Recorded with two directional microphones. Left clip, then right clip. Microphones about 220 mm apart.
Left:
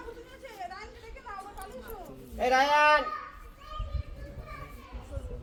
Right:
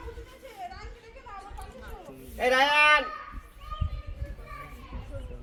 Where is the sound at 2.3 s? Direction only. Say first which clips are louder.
Right 2 dB; 5° right (ahead or behind).